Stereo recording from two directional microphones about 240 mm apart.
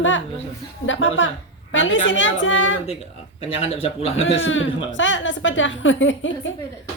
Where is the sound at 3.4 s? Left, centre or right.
Left.